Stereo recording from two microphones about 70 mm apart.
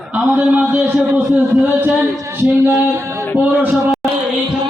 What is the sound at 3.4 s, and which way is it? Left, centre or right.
Speech, right.